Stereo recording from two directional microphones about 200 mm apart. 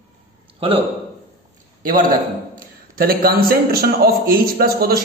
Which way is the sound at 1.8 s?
45° right (ahead or behind).